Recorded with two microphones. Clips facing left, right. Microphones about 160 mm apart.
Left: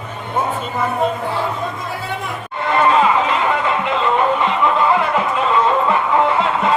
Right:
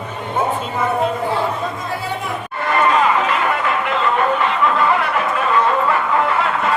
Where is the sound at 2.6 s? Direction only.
20° left (ahead or behind).